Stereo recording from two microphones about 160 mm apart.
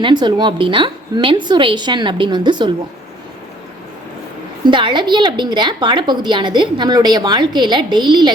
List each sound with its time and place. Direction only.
0.0 s a woman's voice: 30° right (ahead or behind)
4.6 s a woman's voice: 30° right (ahead or behind)